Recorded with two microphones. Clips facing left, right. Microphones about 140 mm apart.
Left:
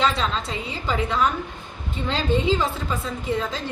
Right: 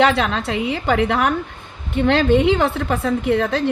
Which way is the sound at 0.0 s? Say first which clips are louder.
Right 6 dB; 65° right (ahead or behind).